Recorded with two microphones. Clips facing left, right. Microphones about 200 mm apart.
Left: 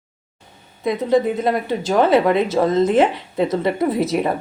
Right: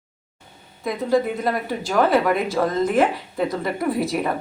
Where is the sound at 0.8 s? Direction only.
20° left (ahead or behind).